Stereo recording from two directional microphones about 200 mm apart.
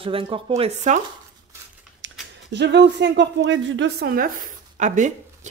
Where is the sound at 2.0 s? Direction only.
70° right (ahead or behind).